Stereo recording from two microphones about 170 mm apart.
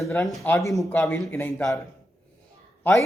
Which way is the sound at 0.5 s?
20° left (ahead or behind).